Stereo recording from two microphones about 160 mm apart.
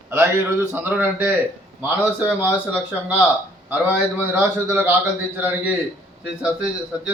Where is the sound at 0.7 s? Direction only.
10° right (ahead or behind).